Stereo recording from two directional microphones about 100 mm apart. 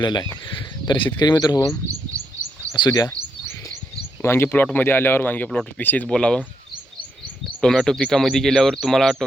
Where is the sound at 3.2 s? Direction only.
35° right (ahead or behind).